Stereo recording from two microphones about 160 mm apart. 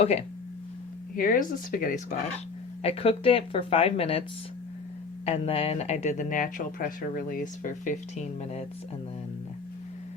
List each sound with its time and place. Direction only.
0.0 s speech: 40° left (ahead or behind)
1.1 s speech: 60° left (ahead or behind)
2.8 s speech: 35° left (ahead or behind)
5.2 s speech: 35° left (ahead or behind)